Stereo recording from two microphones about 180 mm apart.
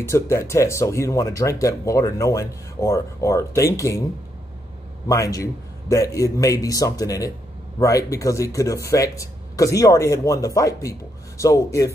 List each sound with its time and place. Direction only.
0.1 s speech: 15° left (ahead or behind)
5.0 s speech: 20° left (ahead or behind)